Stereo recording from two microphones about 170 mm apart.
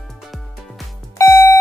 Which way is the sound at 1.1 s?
15° left (ahead or behind).